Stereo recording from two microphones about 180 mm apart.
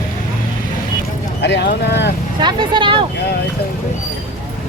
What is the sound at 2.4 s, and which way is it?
Vehicle, 25° right (ahead or behind).